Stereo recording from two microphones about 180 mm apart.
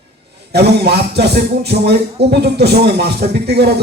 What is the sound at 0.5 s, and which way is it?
Speech, 65° right (ahead or behind).